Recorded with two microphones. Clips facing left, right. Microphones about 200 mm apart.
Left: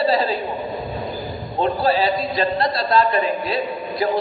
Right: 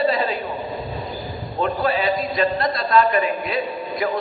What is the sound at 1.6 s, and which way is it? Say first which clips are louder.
A man's voice: left 2 dB; 30° left (ahead or behind).